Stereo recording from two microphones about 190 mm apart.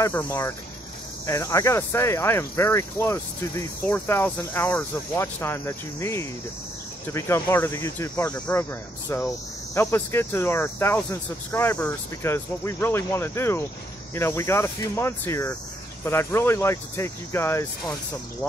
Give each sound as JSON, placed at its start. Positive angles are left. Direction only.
{"t": 0.0, "sound": "speech", "side_deg": 15}